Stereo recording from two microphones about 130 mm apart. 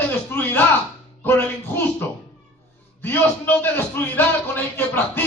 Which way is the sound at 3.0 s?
15° left (ahead or behind).